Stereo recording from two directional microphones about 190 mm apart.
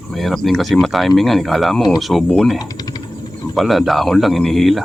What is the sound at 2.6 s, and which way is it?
Typing, 20° left (ahead or behind).